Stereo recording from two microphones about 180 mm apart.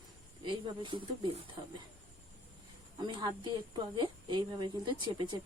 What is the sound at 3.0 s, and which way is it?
A woman's voice, 25° right (ahead or behind).